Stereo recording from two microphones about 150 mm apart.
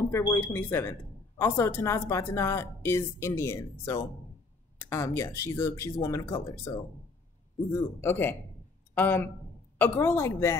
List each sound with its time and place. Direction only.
0.1 s a woman's voice: 15° left (ahead or behind)
8.0 s speech: 15° left (ahead or behind)